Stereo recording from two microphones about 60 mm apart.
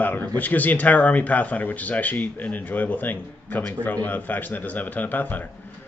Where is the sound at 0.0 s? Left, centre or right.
Left.